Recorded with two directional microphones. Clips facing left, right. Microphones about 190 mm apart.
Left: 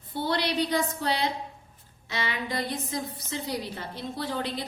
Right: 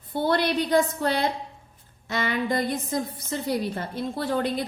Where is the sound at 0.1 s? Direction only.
50° right (ahead or behind).